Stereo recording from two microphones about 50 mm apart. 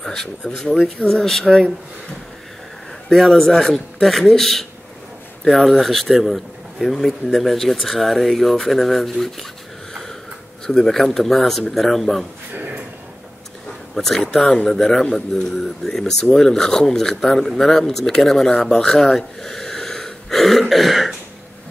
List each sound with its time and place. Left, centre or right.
0.0 s speech: centre
3.1 s a man's voice: centre
10.7 s a man's voice: centre
12.5 s a sound: right
13.9 s a man's voice: centre